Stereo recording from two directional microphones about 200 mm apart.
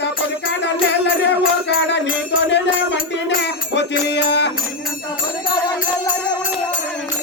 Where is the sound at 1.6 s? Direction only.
60° left (ahead or behind).